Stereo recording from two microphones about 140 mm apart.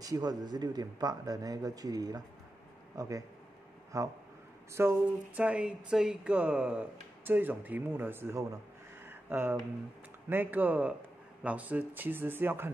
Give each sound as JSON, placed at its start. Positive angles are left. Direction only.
{"t": 0.0, "sound": "a man's voice", "side_deg": -25}
{"t": 4.7, "sound": "speech", "side_deg": -15}
{"t": 9.0, "sound": "a sound", "side_deg": -15}
{"t": 10.3, "sound": "speech", "side_deg": -15}